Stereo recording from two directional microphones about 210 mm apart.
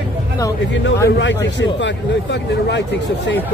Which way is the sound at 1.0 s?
55° left (ahead or behind).